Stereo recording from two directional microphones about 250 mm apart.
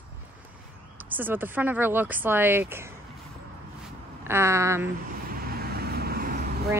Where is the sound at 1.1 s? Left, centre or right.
Centre.